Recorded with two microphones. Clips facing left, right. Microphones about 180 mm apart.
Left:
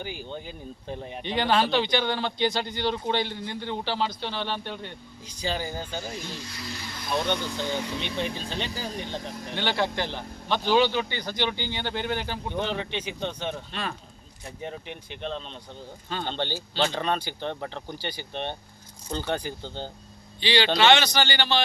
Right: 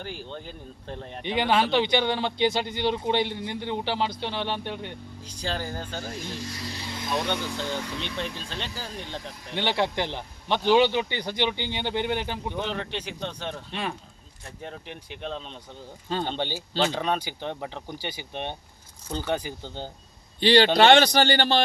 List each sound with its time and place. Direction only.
0.0 s speech: 5° left (ahead or behind)
1.2 s a man's voice: 15° right (ahead or behind)
5.5 s speech: 5° left (ahead or behind)
6.6 s speech: 35° right (ahead or behind)
7.1 s speech: 5° right (ahead or behind)
9.6 s a man's voice: 20° right (ahead or behind)
12.5 s speech: centre (ahead or behind)
13.7 s a man's voice: 20° right (ahead or behind)
14.4 s speech: centre (ahead or behind)
20.4 s a man's voice: 50° right (ahead or behind)